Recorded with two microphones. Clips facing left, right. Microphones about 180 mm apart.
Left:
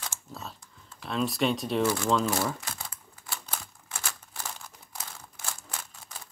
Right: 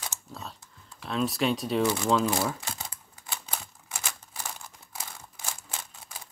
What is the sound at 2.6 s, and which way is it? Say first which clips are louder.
Typewriter: right 2 dB; 20° right (ahead or behind).